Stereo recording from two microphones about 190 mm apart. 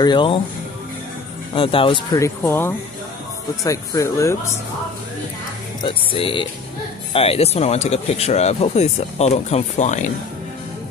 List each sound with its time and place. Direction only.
0.0 s speech: 25° left (ahead or behind)
1.5 s speech: 30° left (ahead or behind)
2.1 s speech: 15° left (ahead or behind)
5.8 s speech: 25° left (ahead or behind)